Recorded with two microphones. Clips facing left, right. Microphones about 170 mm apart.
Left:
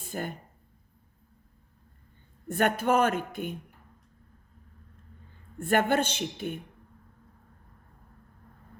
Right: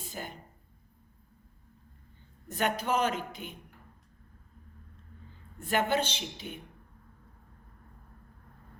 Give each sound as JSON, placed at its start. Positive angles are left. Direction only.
{"t": 0.0, "sound": "speech", "side_deg": 55}
{"t": 2.5, "sound": "a woman's voice", "side_deg": 55}
{"t": 5.5, "sound": "a woman's voice", "side_deg": 55}